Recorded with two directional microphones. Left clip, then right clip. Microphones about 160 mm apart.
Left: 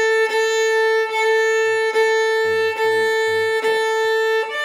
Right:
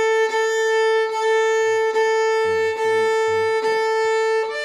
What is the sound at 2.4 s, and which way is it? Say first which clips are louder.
Violin: left 1 dB; 20° left (ahead or behind).